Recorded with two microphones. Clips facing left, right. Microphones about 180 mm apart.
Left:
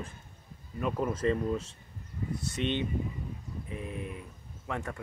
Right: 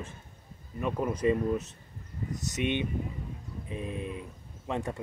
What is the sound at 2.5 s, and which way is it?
Speech, 10° right (ahead or behind).